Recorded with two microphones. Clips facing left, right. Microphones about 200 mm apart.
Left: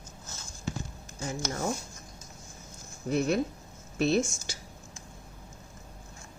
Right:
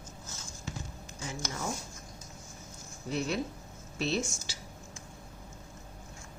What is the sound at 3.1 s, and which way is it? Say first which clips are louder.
Speech: left 6 dB; 50° left (ahead or behind).